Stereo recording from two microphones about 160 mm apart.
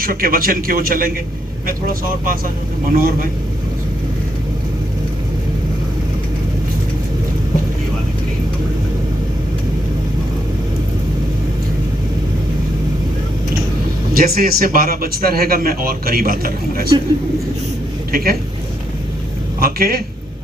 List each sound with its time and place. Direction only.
0.0 s a man's voice: 65° right (ahead or behind)
14.2 s a man's voice: 70° right (ahead or behind)
18.1 s a man's voice: 70° right (ahead or behind)
19.5 s speech: 70° right (ahead or behind)